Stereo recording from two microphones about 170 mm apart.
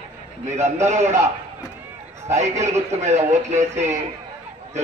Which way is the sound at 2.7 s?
40° right (ahead or behind).